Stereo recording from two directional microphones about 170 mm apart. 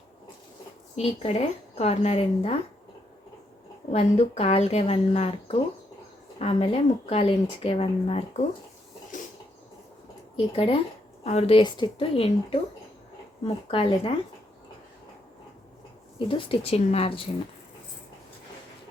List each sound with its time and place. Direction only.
0.9 s speech: 40° left (ahead or behind)
3.9 s speech: 40° left (ahead or behind)
10.3 s speech: 30° left (ahead or behind)
16.1 s speech: 30° left (ahead or behind)